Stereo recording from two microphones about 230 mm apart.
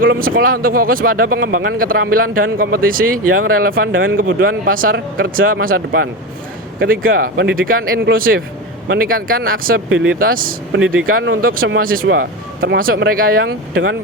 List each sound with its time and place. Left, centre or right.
0.0 s speech: right
3.9 s a man's voice: right
4.2 s speech: right